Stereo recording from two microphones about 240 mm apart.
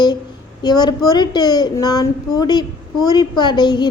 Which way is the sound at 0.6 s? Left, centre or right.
Centre.